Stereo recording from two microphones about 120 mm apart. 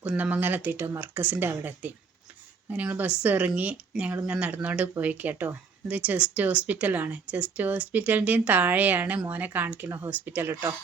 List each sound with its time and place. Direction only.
0.0 s speech: 10° right (ahead or behind)